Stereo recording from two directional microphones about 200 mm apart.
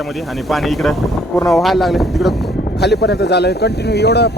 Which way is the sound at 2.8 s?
55° left (ahead or behind).